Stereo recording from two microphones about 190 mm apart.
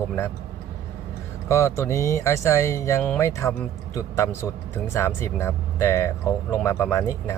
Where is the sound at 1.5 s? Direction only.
15° left (ahead or behind).